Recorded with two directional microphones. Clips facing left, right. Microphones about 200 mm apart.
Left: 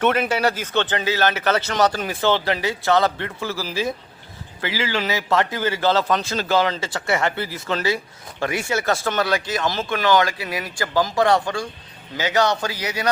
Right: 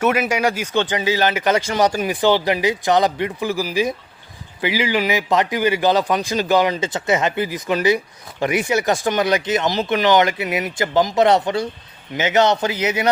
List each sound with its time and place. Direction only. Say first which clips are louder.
0.0 s a man's voice: right 1 dB; 10° right (ahead or behind)